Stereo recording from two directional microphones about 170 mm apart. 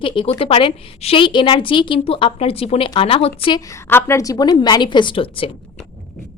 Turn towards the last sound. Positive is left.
turn(degrees=30)  # may be behind; listen again after turning